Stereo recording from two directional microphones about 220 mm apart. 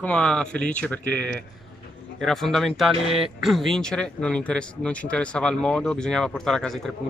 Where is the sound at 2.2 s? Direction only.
Centre (ahead or behind).